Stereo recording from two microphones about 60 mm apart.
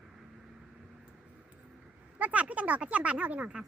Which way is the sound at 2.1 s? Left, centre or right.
Right.